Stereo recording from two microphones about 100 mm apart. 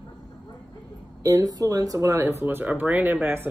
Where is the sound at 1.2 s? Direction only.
35° right (ahead or behind).